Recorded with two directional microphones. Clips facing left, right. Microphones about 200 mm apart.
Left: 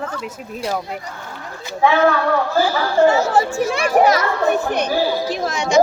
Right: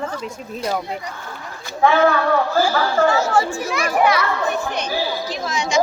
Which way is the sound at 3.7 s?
35° left (ahead or behind).